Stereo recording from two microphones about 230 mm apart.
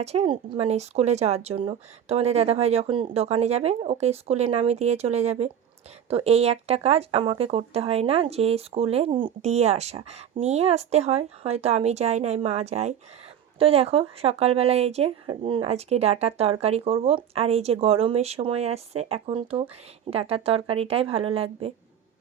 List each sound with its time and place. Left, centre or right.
0.0 s speech: right